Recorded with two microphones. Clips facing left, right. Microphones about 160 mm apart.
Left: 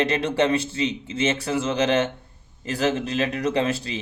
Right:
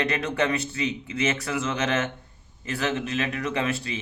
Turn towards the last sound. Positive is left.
turn(degrees=35)  # may be behind; listen again after turning